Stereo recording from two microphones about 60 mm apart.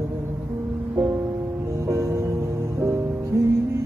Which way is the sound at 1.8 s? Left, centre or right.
Right.